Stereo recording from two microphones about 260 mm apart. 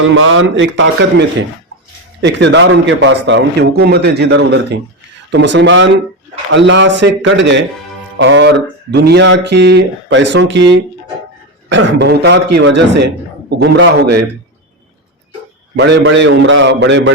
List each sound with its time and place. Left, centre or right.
0.1 s speech: right
2.2 s a man's voice: right
15.7 s speech: right